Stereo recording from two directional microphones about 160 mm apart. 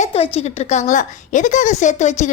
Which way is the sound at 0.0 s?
40° left (ahead or behind).